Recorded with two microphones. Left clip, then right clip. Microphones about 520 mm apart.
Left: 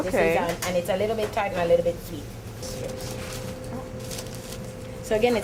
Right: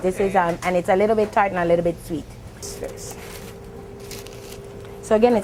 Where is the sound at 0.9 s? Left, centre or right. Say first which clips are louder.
Right 7 dB; right.